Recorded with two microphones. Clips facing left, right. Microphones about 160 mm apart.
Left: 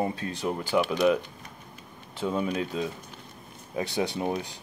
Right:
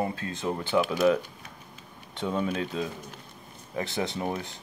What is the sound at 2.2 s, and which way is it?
Speech, 10° left (ahead or behind).